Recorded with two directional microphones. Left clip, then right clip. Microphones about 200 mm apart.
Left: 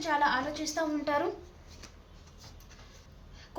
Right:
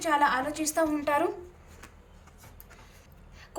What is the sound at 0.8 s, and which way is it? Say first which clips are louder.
Speech: right 4 dB; 15° right (ahead or behind).